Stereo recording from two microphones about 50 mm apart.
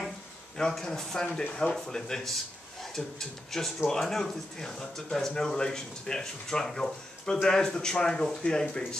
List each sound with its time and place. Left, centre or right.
0.6 s speech: centre